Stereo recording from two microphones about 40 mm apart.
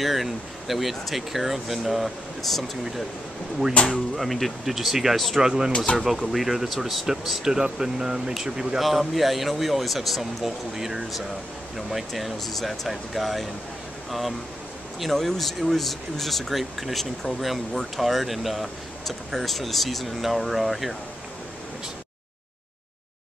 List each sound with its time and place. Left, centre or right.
0.0 s speech: centre
3.8 s speech: left
4.2 s speech: centre
5.4 s speech: centre
15.0 s speech: centre